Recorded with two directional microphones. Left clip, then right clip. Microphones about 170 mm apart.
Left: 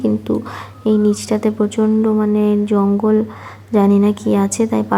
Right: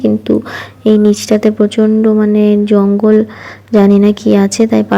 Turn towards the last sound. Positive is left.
turn(degrees=-20)  # may be behind; listen again after turning